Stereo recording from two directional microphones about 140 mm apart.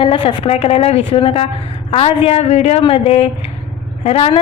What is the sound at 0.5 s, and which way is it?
A woman's voice, 45° left (ahead or behind).